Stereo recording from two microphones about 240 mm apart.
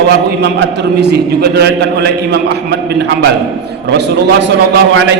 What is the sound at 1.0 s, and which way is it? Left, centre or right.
A man's voice, right.